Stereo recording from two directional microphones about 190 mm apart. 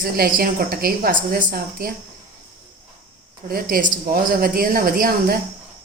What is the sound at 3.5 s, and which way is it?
A woman's voice, 50° right (ahead or behind).